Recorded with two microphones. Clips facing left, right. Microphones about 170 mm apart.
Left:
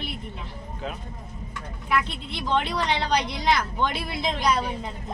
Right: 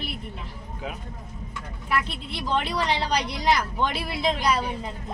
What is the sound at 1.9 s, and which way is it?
Speech, 5° right (ahead or behind).